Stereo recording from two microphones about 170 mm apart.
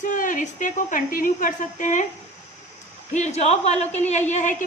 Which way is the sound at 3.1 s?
40° left (ahead or behind).